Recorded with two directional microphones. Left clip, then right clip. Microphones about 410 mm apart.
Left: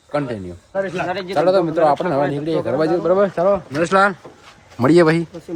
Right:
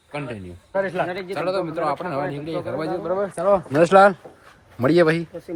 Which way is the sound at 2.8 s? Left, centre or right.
Left.